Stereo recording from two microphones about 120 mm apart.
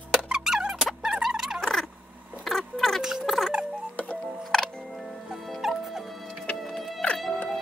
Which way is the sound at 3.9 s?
10° left (ahead or behind).